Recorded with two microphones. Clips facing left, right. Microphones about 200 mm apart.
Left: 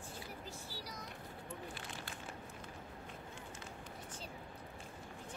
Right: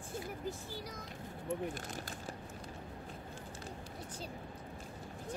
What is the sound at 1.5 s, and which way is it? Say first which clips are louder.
Speech: right 11 dB; 45° right (ahead or behind).